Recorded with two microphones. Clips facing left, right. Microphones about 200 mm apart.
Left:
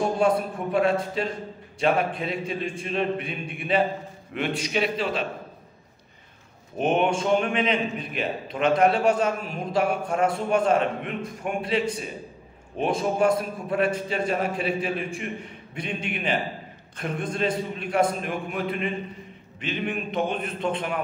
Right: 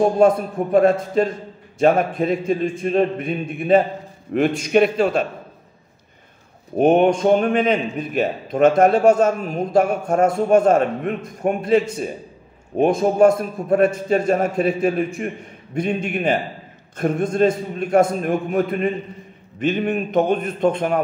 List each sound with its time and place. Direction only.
0.2 s a man's voice: 45° right (ahead or behind)
6.8 s a man's voice: 40° right (ahead or behind)